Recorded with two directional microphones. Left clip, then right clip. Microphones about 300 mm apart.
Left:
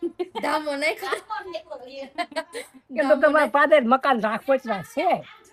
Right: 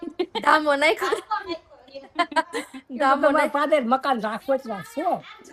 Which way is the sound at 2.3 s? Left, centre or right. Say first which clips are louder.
Right 7 dB; centre.